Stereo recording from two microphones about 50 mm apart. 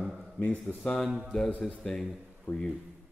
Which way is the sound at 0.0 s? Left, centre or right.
Centre.